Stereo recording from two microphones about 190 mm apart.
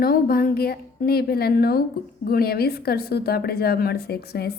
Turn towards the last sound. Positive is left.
turn(degrees=55)  # may be behind; listen again after turning